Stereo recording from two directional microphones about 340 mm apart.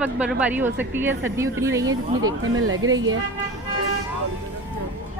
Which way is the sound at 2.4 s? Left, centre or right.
Right.